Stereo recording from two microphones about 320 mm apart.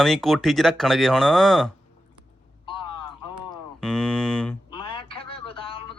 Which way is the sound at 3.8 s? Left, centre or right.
Centre.